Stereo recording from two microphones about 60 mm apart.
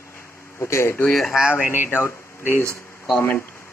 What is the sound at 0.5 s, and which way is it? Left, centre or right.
Speech, left.